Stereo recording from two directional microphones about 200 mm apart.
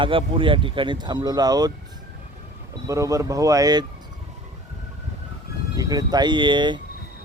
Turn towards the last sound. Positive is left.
turn(degrees=-25)  # may be behind; listen again after turning